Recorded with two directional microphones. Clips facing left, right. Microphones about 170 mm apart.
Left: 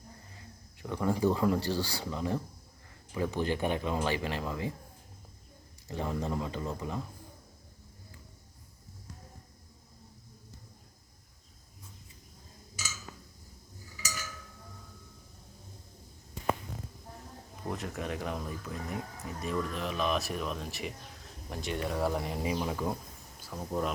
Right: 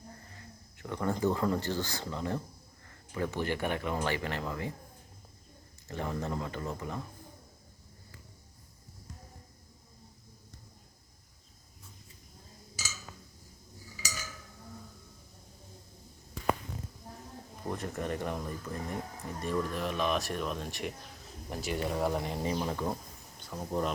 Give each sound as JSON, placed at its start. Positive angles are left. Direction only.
{"t": 0.8, "sound": "speech", "side_deg": 10}
{"t": 5.9, "sound": "speech", "side_deg": 15}
{"t": 17.7, "sound": "speech", "side_deg": 0}